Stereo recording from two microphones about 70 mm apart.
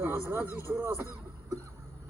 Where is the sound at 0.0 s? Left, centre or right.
Right.